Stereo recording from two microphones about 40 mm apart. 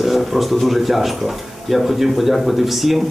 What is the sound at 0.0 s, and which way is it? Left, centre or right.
Speech, centre.